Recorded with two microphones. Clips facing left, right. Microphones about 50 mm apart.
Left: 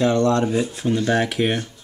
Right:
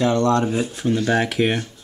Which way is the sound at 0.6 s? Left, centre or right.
Centre.